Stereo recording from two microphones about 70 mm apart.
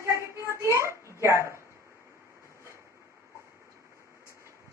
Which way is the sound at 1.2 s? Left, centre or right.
Right.